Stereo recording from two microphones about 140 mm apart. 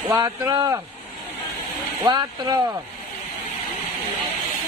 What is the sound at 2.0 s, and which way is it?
Speech, 30° right (ahead or behind).